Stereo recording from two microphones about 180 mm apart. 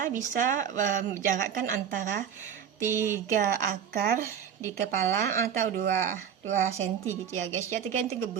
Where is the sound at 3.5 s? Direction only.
55° right (ahead or behind).